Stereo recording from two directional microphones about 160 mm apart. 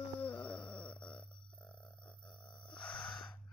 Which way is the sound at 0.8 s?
5° left (ahead or behind).